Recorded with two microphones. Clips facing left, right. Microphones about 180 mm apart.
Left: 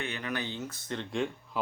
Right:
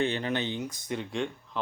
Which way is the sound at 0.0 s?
30° right (ahead or behind).